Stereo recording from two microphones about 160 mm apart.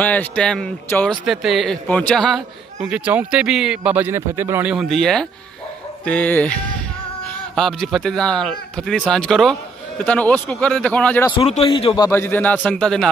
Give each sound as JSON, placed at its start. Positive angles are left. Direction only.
{"t": 0.0, "sound": "a man's voice", "side_deg": 10}
{"t": 4.7, "sound": "a man's voice", "side_deg": 0}
{"t": 11.3, "sound": "a man's voice", "side_deg": 40}
{"t": 12.1, "sound": "a man's voice", "side_deg": 15}